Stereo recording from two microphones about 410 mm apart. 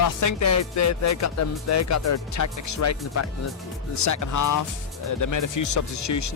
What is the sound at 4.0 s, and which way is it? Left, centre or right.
Speech, left.